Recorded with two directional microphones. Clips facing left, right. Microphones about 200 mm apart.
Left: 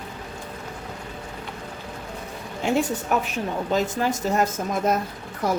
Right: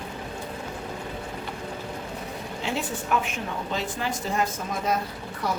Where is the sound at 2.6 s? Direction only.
45° left (ahead or behind).